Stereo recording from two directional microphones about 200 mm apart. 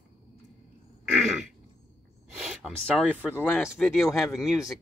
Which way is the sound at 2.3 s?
5° right (ahead or behind).